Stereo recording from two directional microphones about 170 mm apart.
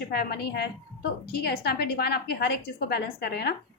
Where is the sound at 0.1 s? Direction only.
65° left (ahead or behind).